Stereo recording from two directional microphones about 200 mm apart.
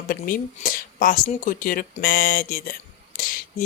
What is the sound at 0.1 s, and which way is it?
Speech, 45° left (ahead or behind).